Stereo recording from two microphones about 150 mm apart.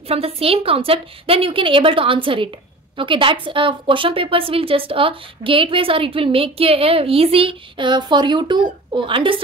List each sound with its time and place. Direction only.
0.1 s a woman's voice: 40° right (ahead or behind)